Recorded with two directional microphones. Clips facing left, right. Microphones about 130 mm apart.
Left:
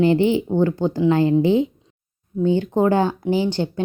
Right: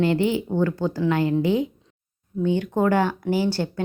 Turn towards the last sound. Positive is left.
turn(degrees=20)  # may be behind; listen again after turning